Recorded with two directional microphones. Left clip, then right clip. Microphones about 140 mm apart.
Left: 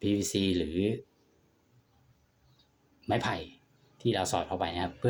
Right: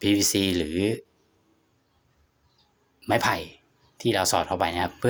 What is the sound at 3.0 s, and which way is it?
Speech, 35° right (ahead or behind).